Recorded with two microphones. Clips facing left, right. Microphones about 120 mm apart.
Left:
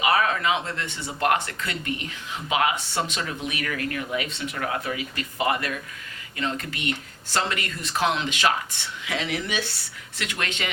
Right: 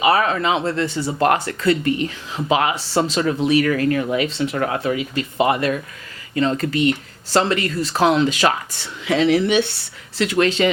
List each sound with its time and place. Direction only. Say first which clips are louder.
0.0 s speech: right 5 dB; 30° right (ahead or behind)